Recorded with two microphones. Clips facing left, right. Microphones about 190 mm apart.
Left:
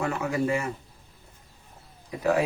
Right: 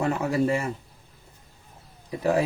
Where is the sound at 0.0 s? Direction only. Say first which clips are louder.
Right 3 dB; 35° right (ahead or behind).